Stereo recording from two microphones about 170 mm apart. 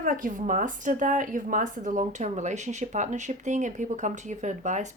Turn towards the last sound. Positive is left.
turn(degrees=-45)  # may be behind; listen again after turning